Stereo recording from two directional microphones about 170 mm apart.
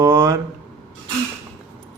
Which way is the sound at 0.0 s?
15° right (ahead or behind).